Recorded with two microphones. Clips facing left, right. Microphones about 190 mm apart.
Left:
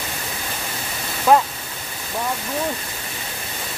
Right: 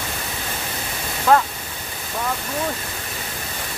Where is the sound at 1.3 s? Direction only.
15° left (ahead or behind).